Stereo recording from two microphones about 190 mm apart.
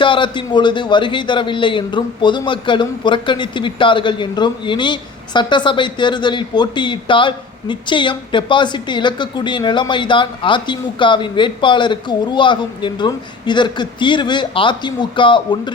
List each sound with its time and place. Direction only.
0.0 s a man's voice: 25° left (ahead or behind)